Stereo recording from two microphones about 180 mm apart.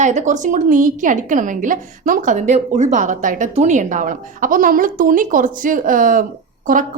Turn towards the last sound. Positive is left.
turn(degrees=-50)  # may be behind; listen again after turning